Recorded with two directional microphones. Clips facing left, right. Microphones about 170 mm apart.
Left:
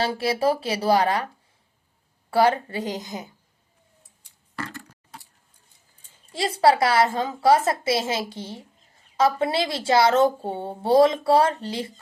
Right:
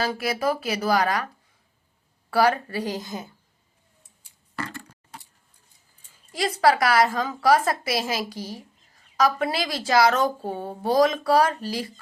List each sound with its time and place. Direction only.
0.0 s speech: 30° left (ahead or behind)
2.3 s speech: 25° left (ahead or behind)
6.3 s speech: 25° left (ahead or behind)